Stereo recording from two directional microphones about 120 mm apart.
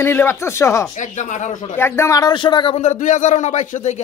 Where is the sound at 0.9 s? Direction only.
90° left.